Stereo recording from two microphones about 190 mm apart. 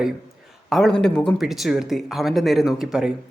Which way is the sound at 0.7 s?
5° left (ahead or behind).